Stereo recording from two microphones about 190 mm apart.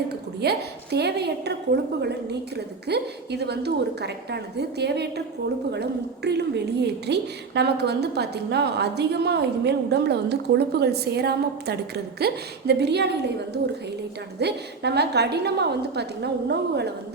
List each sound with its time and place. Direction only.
0.3 s a woman's voice: 60° right (ahead or behind)